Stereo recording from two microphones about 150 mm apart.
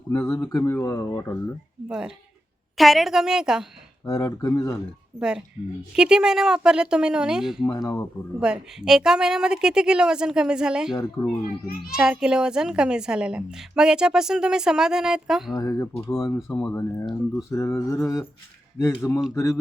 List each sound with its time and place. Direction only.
0.1 s speech: 20° left (ahead or behind)
1.9 s a child's voice: 5° right (ahead or behind)
4.0 s speech: 25° left (ahead or behind)
5.9 s a child's voice: 5° right (ahead or behind)
7.6 s speech: 20° left (ahead or behind)
8.4 s a child's voice: 5° right (ahead or behind)
10.9 s speech: 25° left (ahead or behind)
11.9 s a child's voice: 5° right (ahead or behind)
15.5 s speech: 20° left (ahead or behind)